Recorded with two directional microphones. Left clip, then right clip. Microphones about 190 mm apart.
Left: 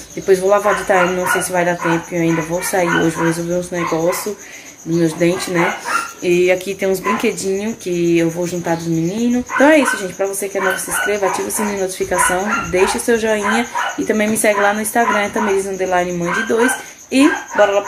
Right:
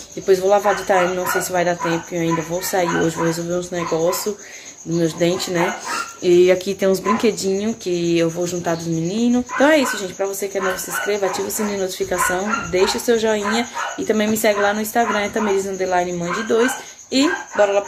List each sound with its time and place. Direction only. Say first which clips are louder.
0.3 s speech: left 2 dB; centre (ahead or behind)
5.0 s speech: left 2 dB; 10° right (ahead or behind)
6.2 s speech: right 2 dB; 30° right (ahead or behind)
7.5 s speech: left 2 dB; 15° right (ahead or behind)
9.6 s speech: left 4 dB; centre (ahead or behind)